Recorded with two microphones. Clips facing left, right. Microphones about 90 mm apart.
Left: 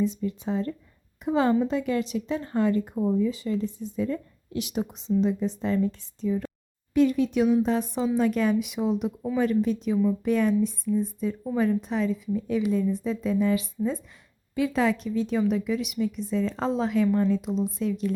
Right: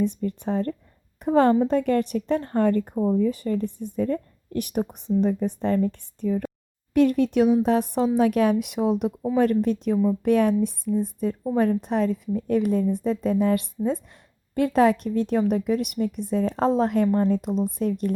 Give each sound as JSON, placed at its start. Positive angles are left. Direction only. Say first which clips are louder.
{"t": 0.0, "sound": "a woman's voice", "louder": "right 2 dB", "side_deg": -55}